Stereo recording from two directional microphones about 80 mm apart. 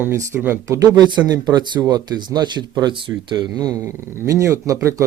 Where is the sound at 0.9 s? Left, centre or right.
Right.